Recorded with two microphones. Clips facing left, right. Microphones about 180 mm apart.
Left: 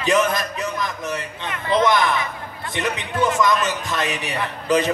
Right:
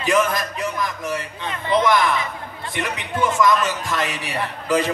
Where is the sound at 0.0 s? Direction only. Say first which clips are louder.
Even; 20° left (ahead or behind).